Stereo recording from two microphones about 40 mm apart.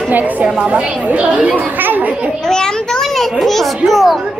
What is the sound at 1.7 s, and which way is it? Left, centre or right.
Children playing, right.